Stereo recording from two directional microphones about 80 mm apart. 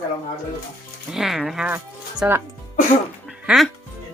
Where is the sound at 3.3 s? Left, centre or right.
Centre.